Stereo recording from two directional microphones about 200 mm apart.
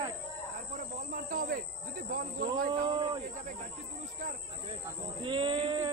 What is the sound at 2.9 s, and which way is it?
Speech, 35° right (ahead or behind).